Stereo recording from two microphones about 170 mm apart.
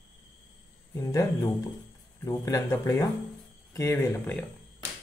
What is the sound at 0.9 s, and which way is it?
Speech, 15° left (ahead or behind).